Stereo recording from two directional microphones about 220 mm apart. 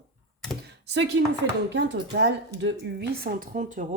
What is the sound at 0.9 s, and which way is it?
A woman's voice, 55° right (ahead or behind).